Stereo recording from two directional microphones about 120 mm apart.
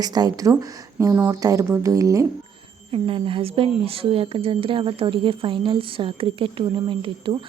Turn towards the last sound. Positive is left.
turn(degrees=-45)  # may be behind; listen again after turning